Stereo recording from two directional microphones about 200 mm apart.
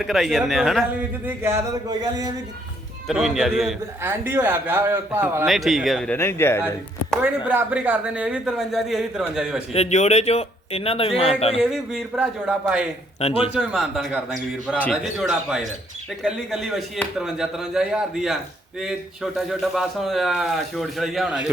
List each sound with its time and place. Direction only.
0.0 s a man's voice: centre (ahead or behind)
1.2 s speech: 10° right (ahead or behind)
3.1 s a man's voice: centre (ahead or behind)
5.5 s a man's voice: centre (ahead or behind)
6.1 s speech: 10° left (ahead or behind)
7.2 s a man's voice: 10° right (ahead or behind)
9.7 s speech: 35° left (ahead or behind)
11.5 s a man's voice: centre (ahead or behind)
13.1 s speech: 30° left (ahead or behind)
13.5 s a man's voice: 5° right (ahead or behind)